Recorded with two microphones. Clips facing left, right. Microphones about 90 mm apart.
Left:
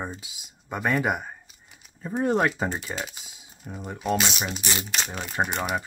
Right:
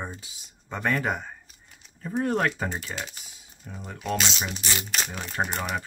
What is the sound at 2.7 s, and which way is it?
Speech, 5° left (ahead or behind).